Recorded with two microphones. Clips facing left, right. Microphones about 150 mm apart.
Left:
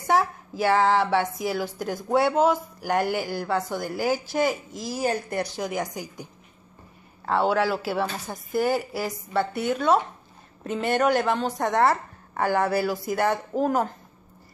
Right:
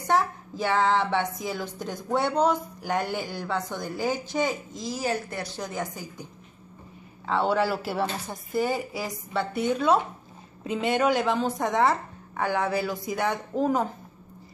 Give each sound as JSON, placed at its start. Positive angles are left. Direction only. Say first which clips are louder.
{"t": 0.0, "sound": "a woman's voice", "louder": "left 2 dB", "side_deg": 10}
{"t": 4.9, "sound": "speech", "louder": "left 3 dB", "side_deg": 55}
{"t": 5.4, "sound": "a woman's voice", "louder": "left 4 dB", "side_deg": 10}
{"t": 7.2, "sound": "a woman's voice", "louder": "left 2 dB", "side_deg": 0}